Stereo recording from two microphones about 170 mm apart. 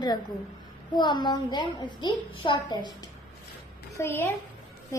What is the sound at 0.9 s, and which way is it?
A child's voice, 25° left (ahead or behind).